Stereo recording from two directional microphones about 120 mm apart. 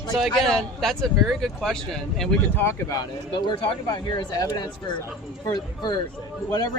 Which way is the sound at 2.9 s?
40° left (ahead or behind).